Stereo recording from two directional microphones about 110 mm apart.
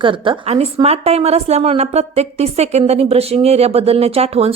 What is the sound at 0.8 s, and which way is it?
Speech, 70° right (ahead or behind).